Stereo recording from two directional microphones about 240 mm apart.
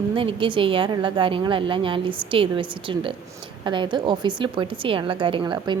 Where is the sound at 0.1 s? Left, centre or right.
Right.